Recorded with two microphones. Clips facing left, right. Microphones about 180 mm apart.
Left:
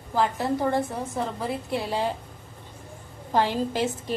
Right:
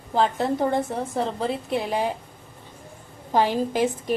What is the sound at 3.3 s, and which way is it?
Speech, 15° right (ahead or behind).